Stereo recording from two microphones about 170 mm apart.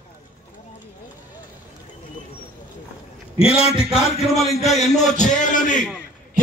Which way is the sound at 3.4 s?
35° left (ahead or behind).